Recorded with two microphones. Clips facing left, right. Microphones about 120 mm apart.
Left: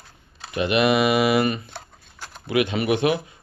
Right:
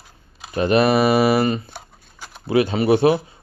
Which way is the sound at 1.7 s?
10° right (ahead or behind).